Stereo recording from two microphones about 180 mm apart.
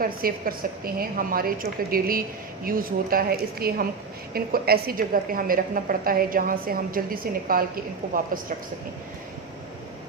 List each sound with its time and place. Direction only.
0.0 s a woman's voice: 55° right (ahead or behind)